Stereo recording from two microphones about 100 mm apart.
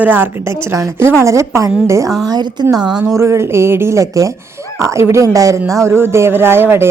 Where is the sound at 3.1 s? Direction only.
25° right (ahead or behind).